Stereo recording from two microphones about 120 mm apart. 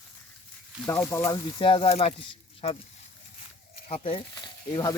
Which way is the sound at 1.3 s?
40° left (ahead or behind).